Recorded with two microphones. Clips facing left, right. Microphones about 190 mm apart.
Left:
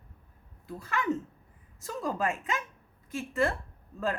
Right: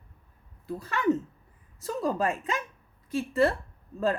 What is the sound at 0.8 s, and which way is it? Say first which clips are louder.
A woman's voice: right 5 dB; 35° right (ahead or behind).